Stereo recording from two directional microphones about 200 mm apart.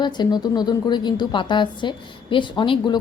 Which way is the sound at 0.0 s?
20° left (ahead or behind).